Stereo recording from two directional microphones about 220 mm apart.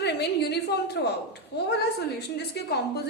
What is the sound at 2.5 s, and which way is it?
Speech, 45° left (ahead or behind).